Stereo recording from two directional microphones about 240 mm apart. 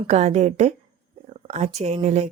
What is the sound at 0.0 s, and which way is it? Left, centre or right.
A woman's voice, right.